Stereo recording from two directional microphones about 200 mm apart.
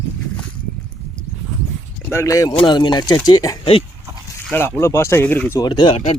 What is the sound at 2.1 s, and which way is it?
Speech, 15° left (ahead or behind).